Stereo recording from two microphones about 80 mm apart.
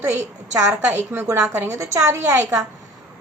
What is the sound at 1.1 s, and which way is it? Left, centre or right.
A woman's voice, right.